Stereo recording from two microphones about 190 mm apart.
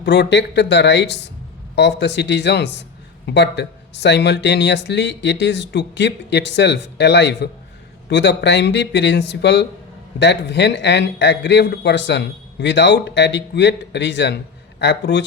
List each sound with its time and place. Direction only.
0.0 s speech: 65° left (ahead or behind)